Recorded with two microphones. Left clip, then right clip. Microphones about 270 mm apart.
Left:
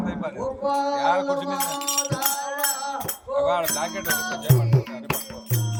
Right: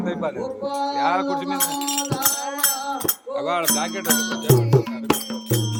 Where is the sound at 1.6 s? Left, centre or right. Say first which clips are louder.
Right 1 dB; centre.